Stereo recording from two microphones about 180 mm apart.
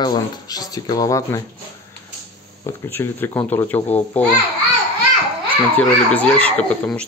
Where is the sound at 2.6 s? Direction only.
15° left (ahead or behind).